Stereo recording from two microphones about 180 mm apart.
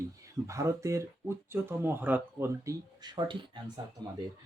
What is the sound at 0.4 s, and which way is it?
Speech, 15° right (ahead or behind).